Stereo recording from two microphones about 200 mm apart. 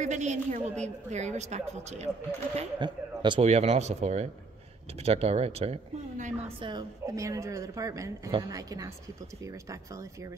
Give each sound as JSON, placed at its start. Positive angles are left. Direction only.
{"t": 0.0, "sound": "a woman's voice", "side_deg": -35}
{"t": 2.5, "sound": "a woman's voice", "side_deg": -25}
{"t": 6.6, "sound": "a woman's voice", "side_deg": -20}